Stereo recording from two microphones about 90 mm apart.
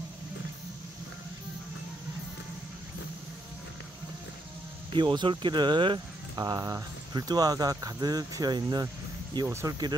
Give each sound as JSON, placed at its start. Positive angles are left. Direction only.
{"t": 4.9, "sound": "speech", "side_deg": -60}
{"t": 6.3, "sound": "speech", "side_deg": -45}
{"t": 9.5, "sound": "speech", "side_deg": -30}